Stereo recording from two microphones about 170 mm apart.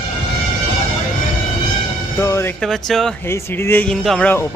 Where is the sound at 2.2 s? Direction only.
15° left (ahead or behind).